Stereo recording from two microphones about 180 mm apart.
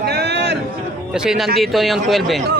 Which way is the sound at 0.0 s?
70° right (ahead or behind).